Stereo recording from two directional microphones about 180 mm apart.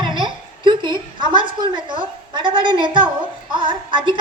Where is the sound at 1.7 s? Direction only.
25° right (ahead or behind).